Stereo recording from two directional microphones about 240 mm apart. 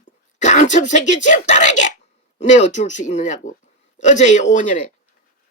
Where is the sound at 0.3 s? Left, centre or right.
Left.